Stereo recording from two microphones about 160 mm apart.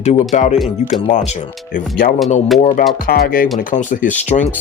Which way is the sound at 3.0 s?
65° left (ahead or behind).